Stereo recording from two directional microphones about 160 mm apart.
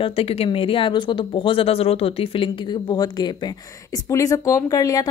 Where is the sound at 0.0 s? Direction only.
35° left (ahead or behind).